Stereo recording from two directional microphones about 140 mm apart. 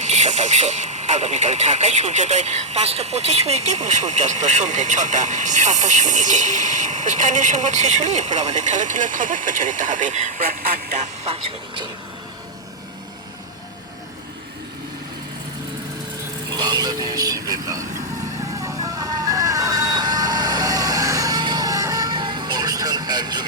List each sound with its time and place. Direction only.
0.0 s speech: 55° right (ahead or behind)
16.5 s speech: 30° right (ahead or behind)
18.6 s vehicle: 25° right (ahead or behind)